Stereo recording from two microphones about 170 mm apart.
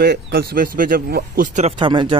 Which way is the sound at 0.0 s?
70° right (ahead or behind).